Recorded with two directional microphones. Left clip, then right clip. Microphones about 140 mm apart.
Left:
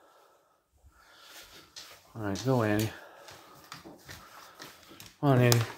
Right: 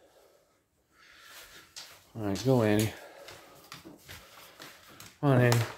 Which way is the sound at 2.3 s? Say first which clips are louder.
Right 2 dB; 25° right (ahead or behind).